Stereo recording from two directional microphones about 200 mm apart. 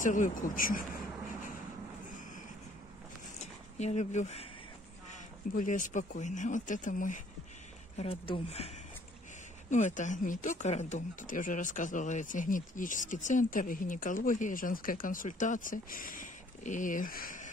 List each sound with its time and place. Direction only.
0.0 s speech: 40° left (ahead or behind)
3.3 s a sound: 35° left (ahead or behind)
5.5 s speech: 40° left (ahead or behind)
8.0 s speech: 30° left (ahead or behind)